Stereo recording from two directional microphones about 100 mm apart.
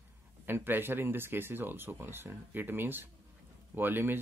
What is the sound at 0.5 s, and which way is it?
Speech, 20° right (ahead or behind).